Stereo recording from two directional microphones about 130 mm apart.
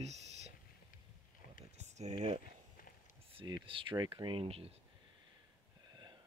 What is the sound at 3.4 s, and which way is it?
Speech, 35° right (ahead or behind).